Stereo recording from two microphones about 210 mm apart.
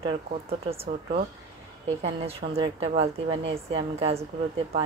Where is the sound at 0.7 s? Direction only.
30° right (ahead or behind).